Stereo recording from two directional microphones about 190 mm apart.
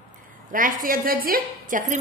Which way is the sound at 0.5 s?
45° right (ahead or behind).